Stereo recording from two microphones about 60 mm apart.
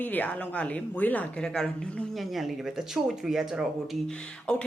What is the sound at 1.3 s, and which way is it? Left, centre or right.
Speech, centre.